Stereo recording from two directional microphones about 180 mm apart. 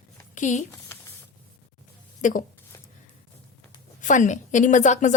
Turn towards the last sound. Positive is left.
turn(degrees=40)  # may be behind; listen again after turning